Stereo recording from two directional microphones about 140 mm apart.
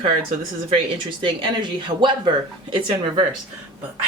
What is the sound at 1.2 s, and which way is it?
Speech, 35° right (ahead or behind).